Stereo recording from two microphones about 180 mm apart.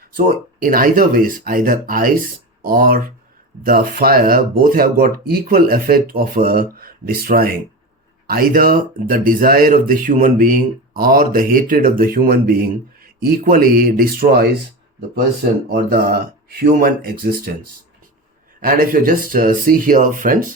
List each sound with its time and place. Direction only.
0.2 s speech: 50° right (ahead or behind)
15.7 s speech: 55° right (ahead or behind)
18.6 s speech: 55° right (ahead or behind)